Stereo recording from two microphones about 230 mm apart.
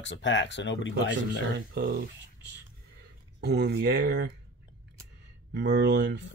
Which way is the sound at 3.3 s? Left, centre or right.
Right.